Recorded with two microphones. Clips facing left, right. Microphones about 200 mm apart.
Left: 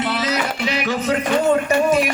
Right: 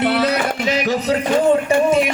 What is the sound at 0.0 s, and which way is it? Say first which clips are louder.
Music: right 5 dB; 60° right (ahead or behind).